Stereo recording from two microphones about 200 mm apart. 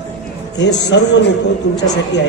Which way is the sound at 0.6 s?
60° left (ahead or behind).